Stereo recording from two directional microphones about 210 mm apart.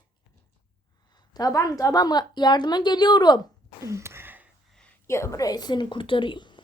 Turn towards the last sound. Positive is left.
turn(degrees=20)  # may be behind; listen again after turning